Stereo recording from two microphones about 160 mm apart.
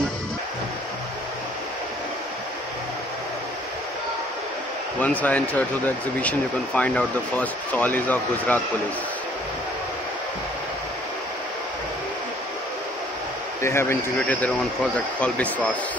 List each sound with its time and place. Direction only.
5.0 s speech: 10° left (ahead or behind)
13.6 s speech: 15° left (ahead or behind)